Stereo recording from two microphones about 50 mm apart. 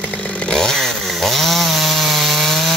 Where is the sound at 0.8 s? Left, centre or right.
Centre.